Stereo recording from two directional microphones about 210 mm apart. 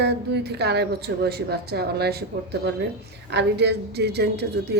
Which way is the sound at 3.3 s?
55° right (ahead or behind).